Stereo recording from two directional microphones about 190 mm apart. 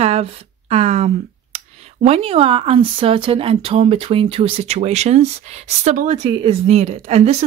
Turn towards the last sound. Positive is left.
turn(degrees=-35)  # may be behind; listen again after turning